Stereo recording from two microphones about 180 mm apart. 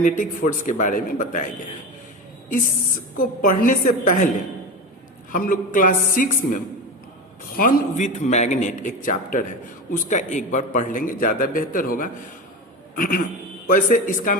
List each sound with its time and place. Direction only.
0.0 s a man's voice: 45° left (ahead or behind)
3.2 s a man's voice: 50° left (ahead or behind)
5.3 s a man's voice: 50° left (ahead or behind)